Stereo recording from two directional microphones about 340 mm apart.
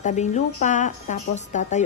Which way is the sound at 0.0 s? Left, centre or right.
Left.